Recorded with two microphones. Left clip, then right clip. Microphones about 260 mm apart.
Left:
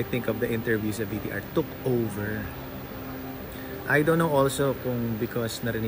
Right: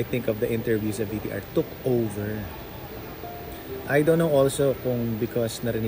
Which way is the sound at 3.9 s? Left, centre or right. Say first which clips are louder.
Right 2 dB; centre.